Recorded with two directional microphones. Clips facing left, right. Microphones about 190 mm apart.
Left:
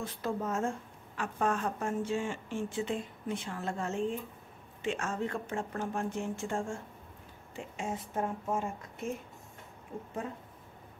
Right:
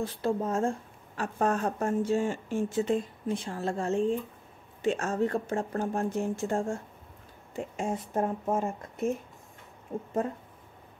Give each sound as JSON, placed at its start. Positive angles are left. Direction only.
{"t": 0.0, "sound": "a woman's voice", "side_deg": -30}